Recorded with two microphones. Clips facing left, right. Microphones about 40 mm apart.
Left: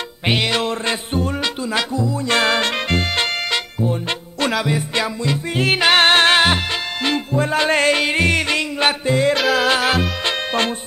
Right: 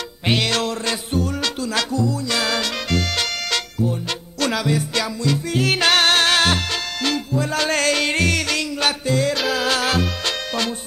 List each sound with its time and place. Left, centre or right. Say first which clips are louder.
0.3 s music: left 1 dB; centre
2.2 s music: left 5 dB; left
4.5 s music: left 1 dB; centre
9.4 s music: left 4 dB; centre
9.7 s music: left 3 dB; centre